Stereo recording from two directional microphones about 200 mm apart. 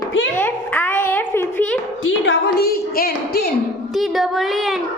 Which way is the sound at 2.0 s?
60° left (ahead or behind).